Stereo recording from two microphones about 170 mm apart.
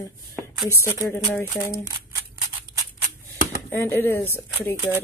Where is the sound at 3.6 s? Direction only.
10° left (ahead or behind).